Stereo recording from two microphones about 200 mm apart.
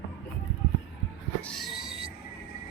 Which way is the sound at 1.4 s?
5° left (ahead or behind).